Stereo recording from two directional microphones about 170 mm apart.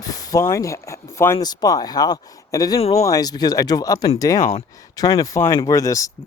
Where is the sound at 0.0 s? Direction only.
20° left (ahead or behind).